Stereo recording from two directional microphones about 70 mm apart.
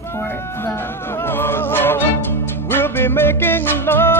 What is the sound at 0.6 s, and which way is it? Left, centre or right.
Music, left.